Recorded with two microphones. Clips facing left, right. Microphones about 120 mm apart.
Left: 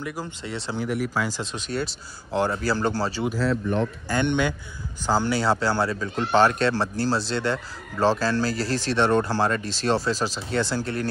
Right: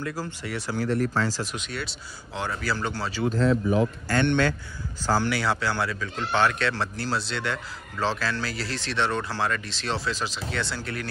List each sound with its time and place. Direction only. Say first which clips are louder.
0.0 s speech: even; 15° left (ahead or behind)
0.8 s speech: right 2 dB; 10° left (ahead or behind)
1.6 s speech: left 6 dB; 35° left (ahead or behind)
3.3 s speech: right 6 dB; 5° left (ahead or behind)
4.1 s speech: even; 15° left (ahead or behind)
5.3 s speech: left 4 dB; 30° left (ahead or behind)